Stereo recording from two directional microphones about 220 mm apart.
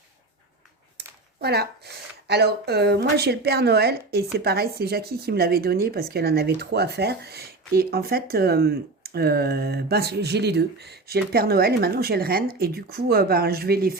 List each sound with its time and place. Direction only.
0.9 s a woman's voice: 45° right (ahead or behind)